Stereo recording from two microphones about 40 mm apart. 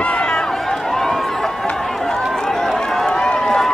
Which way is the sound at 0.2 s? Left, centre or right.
Centre.